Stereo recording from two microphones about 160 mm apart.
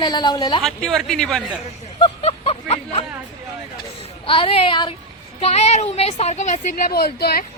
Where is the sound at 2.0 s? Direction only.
35° left (ahead or behind).